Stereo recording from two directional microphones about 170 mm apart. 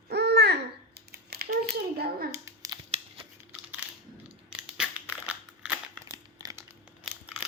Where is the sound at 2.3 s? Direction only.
15° right (ahead or behind).